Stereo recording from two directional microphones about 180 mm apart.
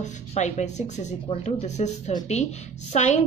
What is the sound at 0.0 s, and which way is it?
A woman's voice, 40° left (ahead or behind).